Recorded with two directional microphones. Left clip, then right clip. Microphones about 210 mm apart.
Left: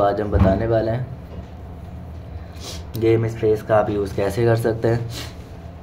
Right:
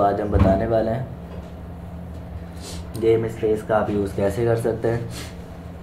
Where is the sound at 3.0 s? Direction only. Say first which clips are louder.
Left 1 dB; 35° left (ahead or behind).